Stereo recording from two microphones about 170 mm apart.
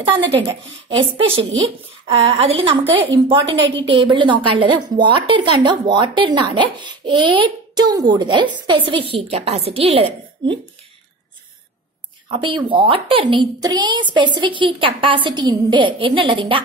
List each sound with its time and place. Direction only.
0.0 s a woman's voice: 30° right (ahead or behind)
12.3 s a woman's voice: 30° right (ahead or behind)